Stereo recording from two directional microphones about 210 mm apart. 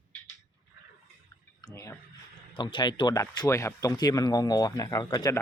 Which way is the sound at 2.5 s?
25° left (ahead or behind).